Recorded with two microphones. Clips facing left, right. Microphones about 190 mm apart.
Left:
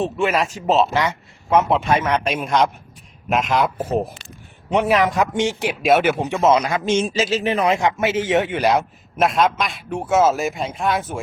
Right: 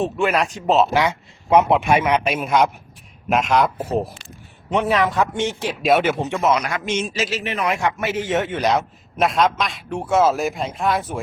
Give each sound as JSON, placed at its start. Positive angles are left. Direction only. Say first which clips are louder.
{"t": 0.0, "sound": "a man's voice", "louder": "even", "side_deg": 0}
{"t": 0.9, "sound": "a man's voice", "louder": "right 2 dB", "side_deg": -15}
{"t": 4.7, "sound": "a man's voice", "louder": "left 2 dB", "side_deg": 10}
{"t": 5.6, "sound": "a man's voice", "louder": "left 1 dB", "side_deg": 0}
{"t": 6.4, "sound": "a man's voice", "louder": "left 5 dB", "side_deg": 25}